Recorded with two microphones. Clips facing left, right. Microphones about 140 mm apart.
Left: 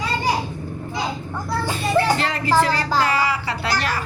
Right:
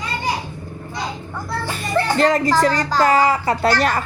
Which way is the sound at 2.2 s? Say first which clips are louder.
Right 4 dB; 40° right (ahead or behind).